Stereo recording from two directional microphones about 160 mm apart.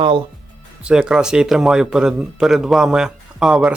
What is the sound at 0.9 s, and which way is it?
Speech, 5° right (ahead or behind).